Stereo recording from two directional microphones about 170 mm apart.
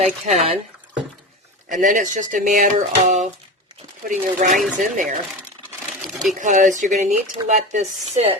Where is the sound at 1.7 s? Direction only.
50° right (ahead or behind).